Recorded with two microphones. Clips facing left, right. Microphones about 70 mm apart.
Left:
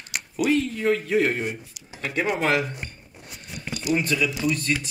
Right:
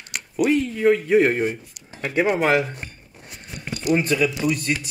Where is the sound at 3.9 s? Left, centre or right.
Right.